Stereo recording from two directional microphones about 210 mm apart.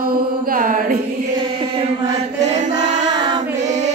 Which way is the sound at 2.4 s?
35° right (ahead or behind).